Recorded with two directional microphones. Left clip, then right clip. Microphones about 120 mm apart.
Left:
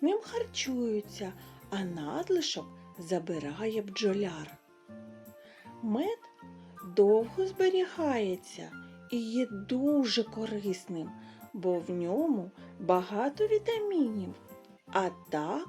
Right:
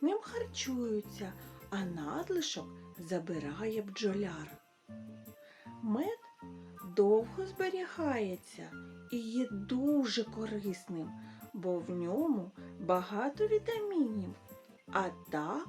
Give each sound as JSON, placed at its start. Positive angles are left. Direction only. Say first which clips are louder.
{"t": 0.0, "sound": "a sound", "louder": "left 4 dB", "side_deg": 25}
{"t": 1.2, "sound": "speech", "louder": "left 5 dB", "side_deg": 25}
{"t": 5.9, "sound": "speech", "louder": "left 4 dB", "side_deg": 20}